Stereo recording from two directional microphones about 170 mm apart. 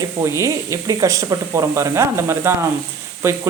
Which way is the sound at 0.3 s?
20° right (ahead or behind).